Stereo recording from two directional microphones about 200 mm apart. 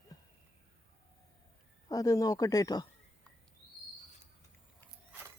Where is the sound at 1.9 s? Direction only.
15° left (ahead or behind).